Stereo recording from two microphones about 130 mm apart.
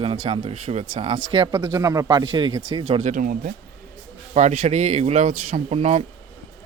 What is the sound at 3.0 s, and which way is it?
Speech, 80° right.